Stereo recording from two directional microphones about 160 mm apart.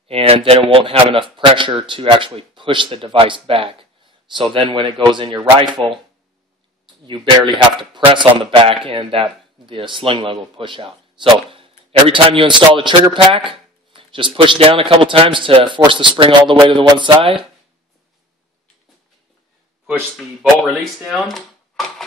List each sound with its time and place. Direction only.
0.1 s a man's voice: 35° right (ahead or behind)
7.1 s a man's voice: 30° right (ahead or behind)
20.6 s speech: centre (ahead or behind)